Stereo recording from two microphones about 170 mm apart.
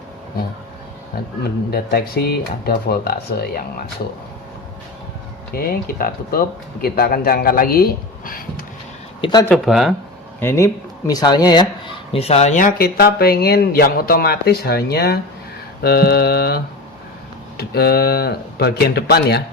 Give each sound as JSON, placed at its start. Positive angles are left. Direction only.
{"t": 1.7, "sound": "speech", "side_deg": 70}
{"t": 5.5, "sound": "speech", "side_deg": 60}
{"t": 9.2, "sound": "speech", "side_deg": 25}
{"t": 9.5, "sound": "speech", "side_deg": 0}
{"t": 10.4, "sound": "speech", "side_deg": 20}